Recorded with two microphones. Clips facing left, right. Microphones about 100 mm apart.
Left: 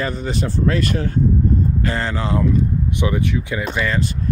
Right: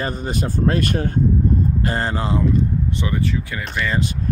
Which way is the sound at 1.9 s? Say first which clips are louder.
Even; 40° right (ahead or behind).